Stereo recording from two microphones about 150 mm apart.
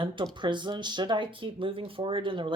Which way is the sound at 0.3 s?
30° right (ahead or behind).